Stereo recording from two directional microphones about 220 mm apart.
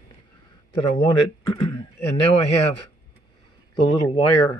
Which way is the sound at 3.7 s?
20° left (ahead or behind).